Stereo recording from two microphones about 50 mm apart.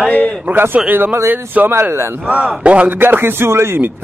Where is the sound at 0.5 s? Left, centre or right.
Right.